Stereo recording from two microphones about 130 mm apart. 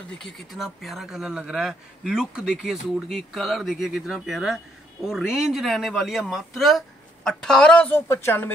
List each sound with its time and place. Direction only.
0.2 s speech: centre (ahead or behind); by 8.5 s 15° left (ahead or behind)